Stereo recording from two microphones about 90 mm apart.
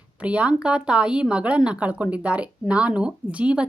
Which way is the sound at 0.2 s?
15° right (ahead or behind).